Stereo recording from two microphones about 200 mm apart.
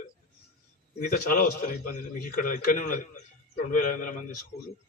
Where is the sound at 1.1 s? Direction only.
45° left (ahead or behind).